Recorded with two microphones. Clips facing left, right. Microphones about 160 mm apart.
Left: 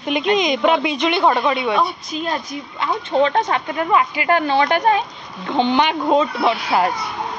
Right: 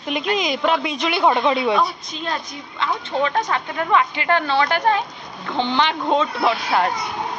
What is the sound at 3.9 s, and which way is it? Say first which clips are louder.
A woman's voice: left 1 dB; 10° left (ahead or behind).